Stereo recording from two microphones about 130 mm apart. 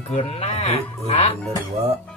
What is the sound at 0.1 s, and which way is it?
Speech, 50° left (ahead or behind).